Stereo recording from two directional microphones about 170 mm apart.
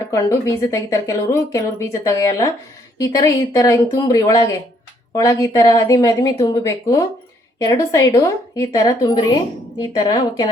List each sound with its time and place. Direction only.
0.1 s speech: 20° left (ahead or behind)